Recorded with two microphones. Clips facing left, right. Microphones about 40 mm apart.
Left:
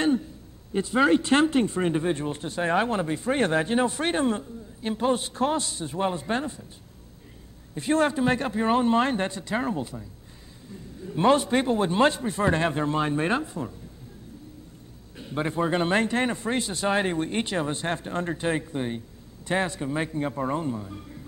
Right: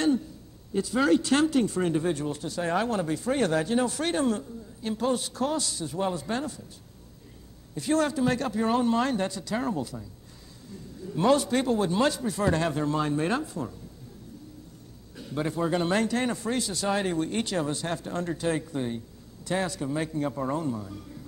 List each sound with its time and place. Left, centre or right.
0.7 s speech: left
7.7 s speech: left
15.1 s speech: left